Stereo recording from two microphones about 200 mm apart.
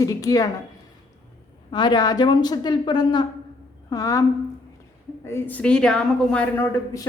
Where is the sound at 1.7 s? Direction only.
20° left (ahead or behind).